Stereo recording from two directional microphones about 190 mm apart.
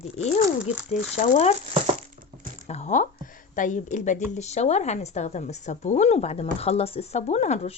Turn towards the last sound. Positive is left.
turn(degrees=35)  # may be behind; listen again after turning